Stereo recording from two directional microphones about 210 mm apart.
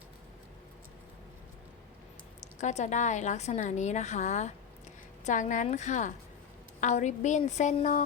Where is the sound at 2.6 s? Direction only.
35° left (ahead or behind).